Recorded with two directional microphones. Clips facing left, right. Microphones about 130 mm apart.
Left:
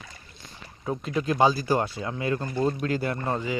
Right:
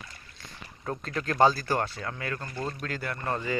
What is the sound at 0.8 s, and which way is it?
Speech, 10° left (ahead or behind).